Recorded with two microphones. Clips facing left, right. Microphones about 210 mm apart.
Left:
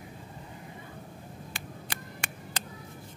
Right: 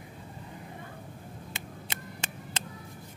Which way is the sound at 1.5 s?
25° right (ahead or behind).